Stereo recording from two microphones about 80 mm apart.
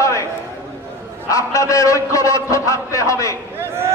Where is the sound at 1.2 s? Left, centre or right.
Left.